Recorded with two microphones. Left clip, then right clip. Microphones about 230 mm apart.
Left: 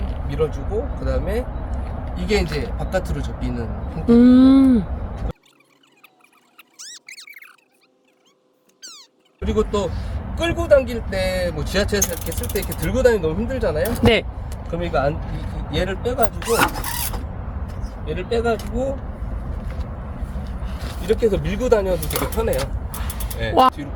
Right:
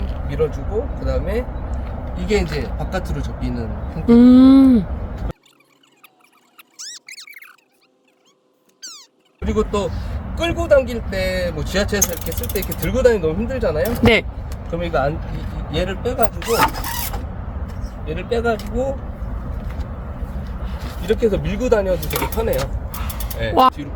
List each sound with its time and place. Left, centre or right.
0.3 s speech: centre
4.0 s speech: centre
6.6 s squeak: centre
8.8 s cat: centre
10.3 s speech: centre
14.0 s speech: centre
18.0 s speech: centre
21.0 s speech: centre
22.0 s speech: centre
22.9 s mechanisms: centre
23.4 s speech: centre